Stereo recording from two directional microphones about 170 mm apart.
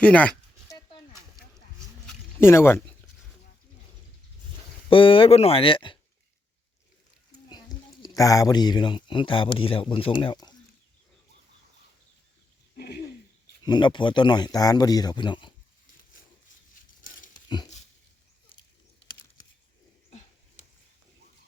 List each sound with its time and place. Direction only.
0.0 s speech: 5° left (ahead or behind)
2.4 s speech: 15° left (ahead or behind)
4.9 s speech: 30° left (ahead or behind)
8.0 s speech: 20° left (ahead or behind)
12.7 s a sound: 65° left (ahead or behind)
13.6 s speech: 25° left (ahead or behind)
17.3 s a sound: 25° left (ahead or behind)